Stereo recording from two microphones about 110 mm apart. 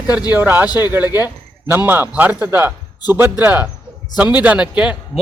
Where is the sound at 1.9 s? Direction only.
15° right (ahead or behind).